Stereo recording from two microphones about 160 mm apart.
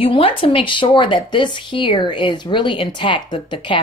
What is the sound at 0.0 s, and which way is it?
Speech, 35° left (ahead or behind).